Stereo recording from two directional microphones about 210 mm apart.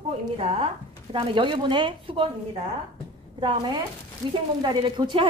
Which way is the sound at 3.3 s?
20° right (ahead or behind).